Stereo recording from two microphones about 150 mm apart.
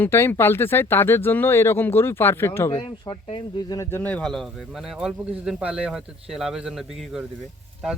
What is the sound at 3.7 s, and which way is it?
Speech, 15° left (ahead or behind).